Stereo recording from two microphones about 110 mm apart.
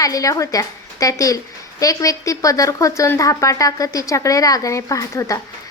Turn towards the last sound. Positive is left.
turn(degrees=30)  # may be behind; listen again after turning